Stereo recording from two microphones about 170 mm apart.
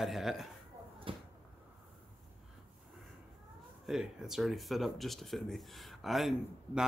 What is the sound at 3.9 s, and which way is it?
Speech, centre (ahead or behind).